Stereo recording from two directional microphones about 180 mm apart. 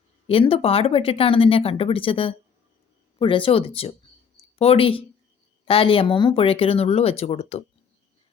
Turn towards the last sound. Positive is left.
turn(degrees=35)  # may be behind; listen again after turning